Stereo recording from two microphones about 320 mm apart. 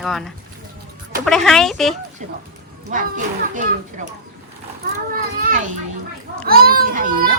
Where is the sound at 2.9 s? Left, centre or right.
Right.